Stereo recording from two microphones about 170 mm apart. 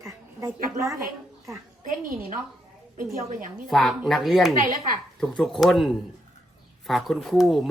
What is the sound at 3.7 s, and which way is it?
Speech, centre (ahead or behind).